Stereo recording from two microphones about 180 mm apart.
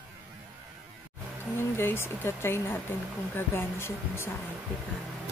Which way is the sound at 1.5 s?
15° left (ahead or behind).